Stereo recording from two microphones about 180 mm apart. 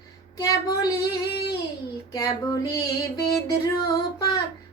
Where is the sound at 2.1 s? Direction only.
20° left (ahead or behind).